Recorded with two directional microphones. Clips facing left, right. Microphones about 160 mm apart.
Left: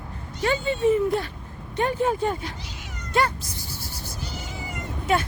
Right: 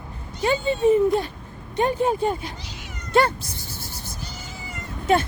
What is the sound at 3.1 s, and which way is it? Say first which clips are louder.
Speech: right 4 dB; 30° right (ahead or behind).